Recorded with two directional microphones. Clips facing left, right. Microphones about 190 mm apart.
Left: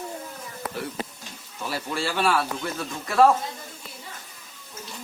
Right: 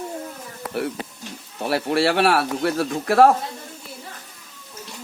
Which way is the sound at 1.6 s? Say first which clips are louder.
Right 9 dB; 65° right (ahead or behind).